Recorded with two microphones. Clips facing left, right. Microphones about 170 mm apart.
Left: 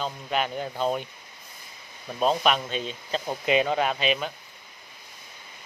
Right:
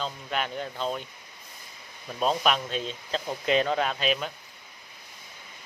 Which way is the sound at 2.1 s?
Centre (ahead or behind).